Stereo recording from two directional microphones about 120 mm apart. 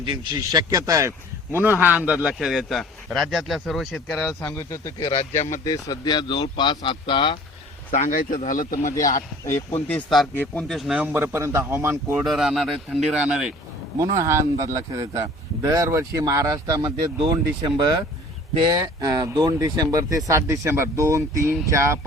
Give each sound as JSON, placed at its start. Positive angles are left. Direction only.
{"t": 0.0, "sound": "speech", "side_deg": -40}
{"t": 1.5, "sound": "a man's voice", "side_deg": -15}
{"t": 4.4, "sound": "speech", "side_deg": 25}
{"t": 7.9, "sound": "speech", "side_deg": 90}
{"t": 8.9, "sound": "speech", "side_deg": 25}
{"t": 10.3, "sound": "a man's voice", "side_deg": 15}
{"t": 10.7, "sound": "a man's voice", "side_deg": 0}
{"t": 11.0, "sound": "a man's voice", "side_deg": -15}
{"t": 12.1, "sound": "a man's voice", "side_deg": 0}
{"t": 14.0, "sound": "a man's voice", "side_deg": -25}